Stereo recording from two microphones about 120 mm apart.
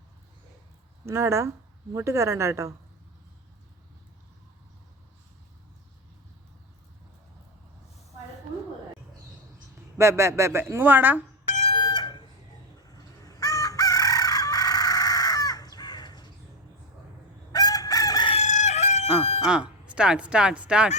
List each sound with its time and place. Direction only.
1.0 s speech: 25° right (ahead or behind)
10.0 s speech: 25° right (ahead or behind)
11.7 s chicken: 35° left (ahead or behind)
12.9 s crowing: 30° left (ahead or behind)
17.5 s chicken: 30° left (ahead or behind)
18.4 s chicken: 75° left (ahead or behind)
19.5 s speech: 5° right (ahead or behind)